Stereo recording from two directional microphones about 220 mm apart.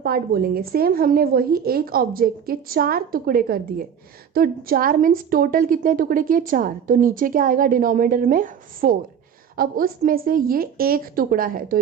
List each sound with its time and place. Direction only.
0.0 s a woman's voice: 45° right (ahead or behind)